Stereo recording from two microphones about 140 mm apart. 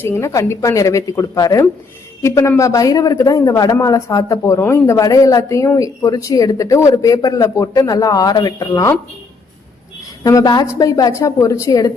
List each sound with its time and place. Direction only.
0.0 s speech: 20° left (ahead or behind)
10.2 s speech: 25° left (ahead or behind)